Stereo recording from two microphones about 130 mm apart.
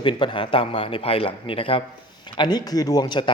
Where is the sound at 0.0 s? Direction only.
40° left (ahead or behind).